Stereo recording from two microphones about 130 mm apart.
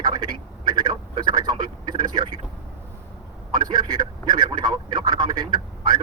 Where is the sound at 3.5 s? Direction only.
35° right (ahead or behind).